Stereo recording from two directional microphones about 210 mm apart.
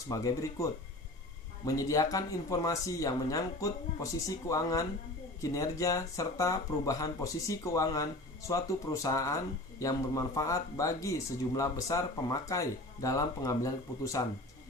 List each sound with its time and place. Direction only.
0.1 s speech: 15° left (ahead or behind)